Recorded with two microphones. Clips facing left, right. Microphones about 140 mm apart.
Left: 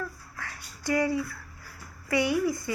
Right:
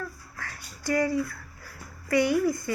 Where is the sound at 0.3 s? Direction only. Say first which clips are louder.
Even; 40° right (ahead or behind).